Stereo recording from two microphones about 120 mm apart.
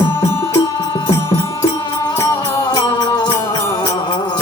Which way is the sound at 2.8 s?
35° left (ahead or behind).